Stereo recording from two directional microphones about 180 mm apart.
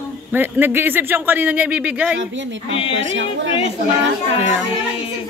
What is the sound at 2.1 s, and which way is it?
A woman's voice, 90° right.